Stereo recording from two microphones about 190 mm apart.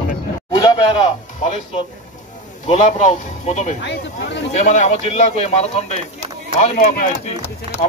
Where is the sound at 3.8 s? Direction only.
65° left (ahead or behind).